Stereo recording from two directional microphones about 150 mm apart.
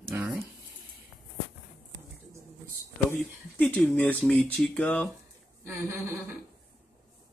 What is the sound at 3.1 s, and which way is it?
Speech, 10° left (ahead or behind).